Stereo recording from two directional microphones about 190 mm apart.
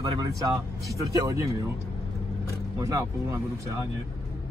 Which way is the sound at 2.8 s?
15° right (ahead or behind).